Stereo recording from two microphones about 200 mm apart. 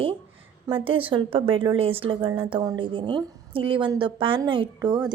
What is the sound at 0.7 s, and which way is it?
A woman's voice, 25° right (ahead or behind).